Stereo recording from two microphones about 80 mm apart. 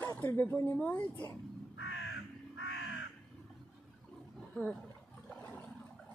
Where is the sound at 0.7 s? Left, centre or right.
Centre.